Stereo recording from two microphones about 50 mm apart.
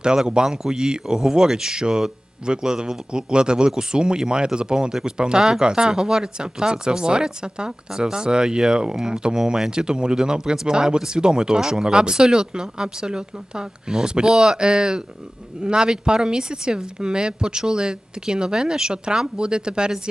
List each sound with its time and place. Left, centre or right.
0.3 s speech: centre